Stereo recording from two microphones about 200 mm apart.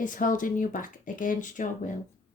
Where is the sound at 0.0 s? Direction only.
40° left (ahead or behind).